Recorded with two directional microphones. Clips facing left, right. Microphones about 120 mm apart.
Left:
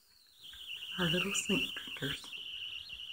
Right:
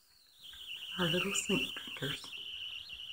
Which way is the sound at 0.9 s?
15° right (ahead or behind).